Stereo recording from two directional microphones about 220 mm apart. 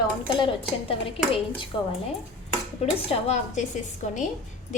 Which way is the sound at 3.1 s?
30° left (ahead or behind).